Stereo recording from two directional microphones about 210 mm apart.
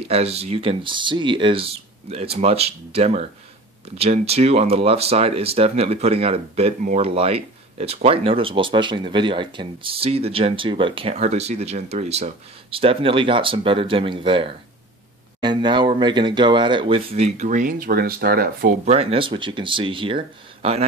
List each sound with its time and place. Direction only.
0.0 s speech: 30° right (ahead or behind); by 18.8 s 45° right (ahead or behind)
18.9 s speech: 30° right (ahead or behind)